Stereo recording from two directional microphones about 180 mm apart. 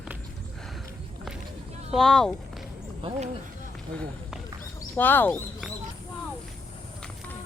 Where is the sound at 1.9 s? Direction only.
5° left (ahead or behind).